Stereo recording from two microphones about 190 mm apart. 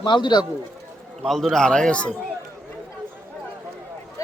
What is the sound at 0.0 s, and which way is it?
Speech, 25° left (ahead or behind).